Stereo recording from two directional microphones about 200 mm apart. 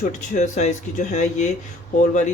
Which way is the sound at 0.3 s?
35° left (ahead or behind).